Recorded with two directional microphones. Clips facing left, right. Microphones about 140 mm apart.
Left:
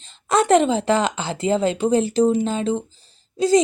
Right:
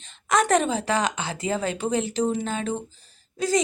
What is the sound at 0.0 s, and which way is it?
A woman's voice, 30° left (ahead or behind).